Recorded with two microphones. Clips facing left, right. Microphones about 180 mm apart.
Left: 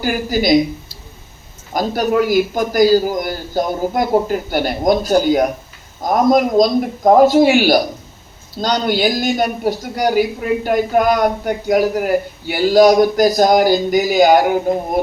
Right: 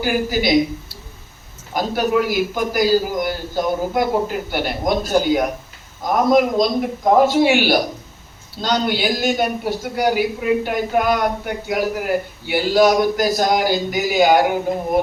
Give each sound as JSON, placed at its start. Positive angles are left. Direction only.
{"t": 0.0, "sound": "a man's voice", "side_deg": 40}
{"t": 1.7, "sound": "a man's voice", "side_deg": 40}